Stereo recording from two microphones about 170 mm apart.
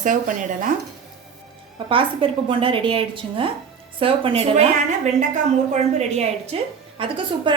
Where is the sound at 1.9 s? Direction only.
30° right (ahead or behind).